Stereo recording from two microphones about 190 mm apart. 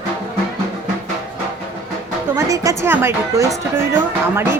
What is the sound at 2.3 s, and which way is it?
Speech, 15° right (ahead or behind).